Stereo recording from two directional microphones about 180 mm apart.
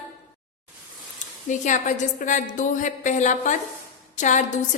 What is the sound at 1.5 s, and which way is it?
A woman's voice, 45° left (ahead or behind).